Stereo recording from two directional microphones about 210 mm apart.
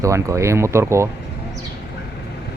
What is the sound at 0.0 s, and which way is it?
Speech, 15° right (ahead or behind).